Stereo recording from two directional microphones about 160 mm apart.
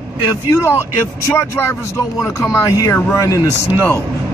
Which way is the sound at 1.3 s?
15° left (ahead or behind).